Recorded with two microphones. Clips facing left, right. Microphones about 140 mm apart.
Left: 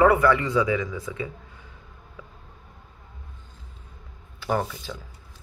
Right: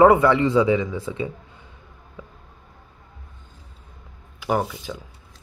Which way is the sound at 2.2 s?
25° right (ahead or behind).